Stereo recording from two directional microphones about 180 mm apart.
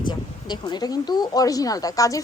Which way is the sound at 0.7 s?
25° left (ahead or behind).